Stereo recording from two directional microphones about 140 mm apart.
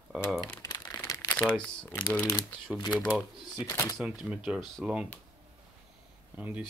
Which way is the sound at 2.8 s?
30° left (ahead or behind).